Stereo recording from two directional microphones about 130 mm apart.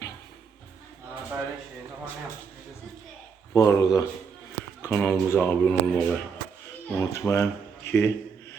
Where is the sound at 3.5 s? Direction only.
25° left (ahead or behind).